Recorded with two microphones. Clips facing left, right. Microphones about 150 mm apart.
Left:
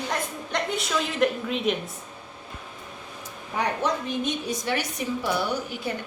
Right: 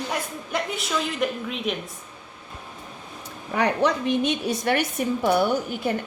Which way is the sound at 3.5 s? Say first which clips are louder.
Right 4 dB; 70° right (ahead or behind).